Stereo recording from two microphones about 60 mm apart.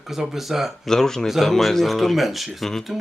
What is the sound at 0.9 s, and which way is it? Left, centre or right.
Speech, centre.